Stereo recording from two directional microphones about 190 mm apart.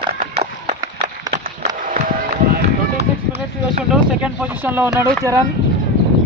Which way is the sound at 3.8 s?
5° right (ahead or behind).